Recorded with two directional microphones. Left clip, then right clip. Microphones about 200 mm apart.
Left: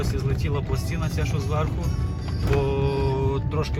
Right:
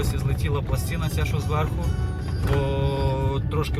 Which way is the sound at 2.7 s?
15° right (ahead or behind).